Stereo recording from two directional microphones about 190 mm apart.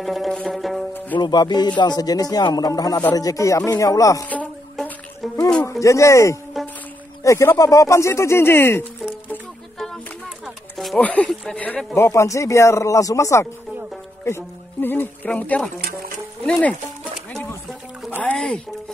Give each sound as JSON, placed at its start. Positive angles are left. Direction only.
{"t": 0.0, "sound": "music", "side_deg": 0}
{"t": 1.2, "sound": "speech", "side_deg": 20}
{"t": 6.5, "sound": "music", "side_deg": 0}
{"t": 7.2, "sound": "speech", "side_deg": 15}
{"t": 9.3, "sound": "music", "side_deg": 5}
{"t": 10.4, "sound": "speech", "side_deg": 0}
{"t": 16.4, "sound": "music", "side_deg": 5}
{"t": 17.3, "sound": "a sound", "side_deg": 10}
{"t": 18.1, "sound": "music", "side_deg": 5}